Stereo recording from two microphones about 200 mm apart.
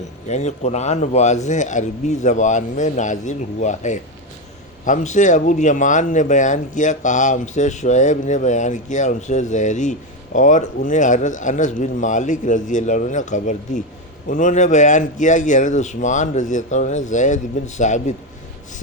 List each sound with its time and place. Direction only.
0.3 s speech: 35° left (ahead or behind)